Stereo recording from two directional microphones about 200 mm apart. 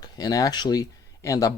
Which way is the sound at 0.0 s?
20° left (ahead or behind).